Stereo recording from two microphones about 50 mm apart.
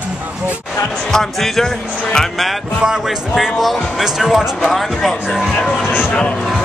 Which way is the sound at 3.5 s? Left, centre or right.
Centre.